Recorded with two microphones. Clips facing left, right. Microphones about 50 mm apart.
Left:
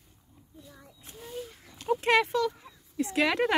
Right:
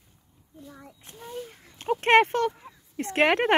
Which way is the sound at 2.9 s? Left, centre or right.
Right.